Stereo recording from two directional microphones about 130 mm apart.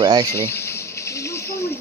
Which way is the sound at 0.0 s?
35° right (ahead or behind).